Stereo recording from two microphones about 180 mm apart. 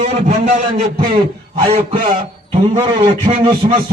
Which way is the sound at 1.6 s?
30° right (ahead or behind).